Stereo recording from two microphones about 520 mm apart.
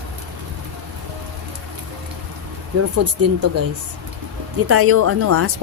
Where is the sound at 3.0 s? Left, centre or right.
Right.